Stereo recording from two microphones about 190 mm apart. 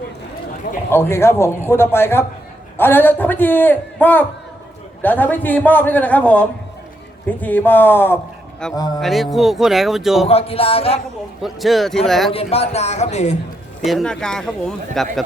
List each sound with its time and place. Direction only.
0.9 s a man's voice: 10° left (ahead or behind)
10.2 s speech: 30° left (ahead or behind)
11.4 s speech: centre (ahead or behind)
12.3 s speech: 30° left (ahead or behind)
13.8 s speech: centre (ahead or behind)